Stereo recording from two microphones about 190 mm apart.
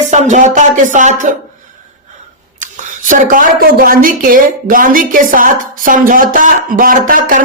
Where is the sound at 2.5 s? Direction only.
40° right (ahead or behind).